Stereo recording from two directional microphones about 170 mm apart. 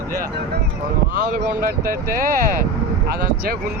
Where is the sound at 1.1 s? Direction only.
60° right (ahead or behind).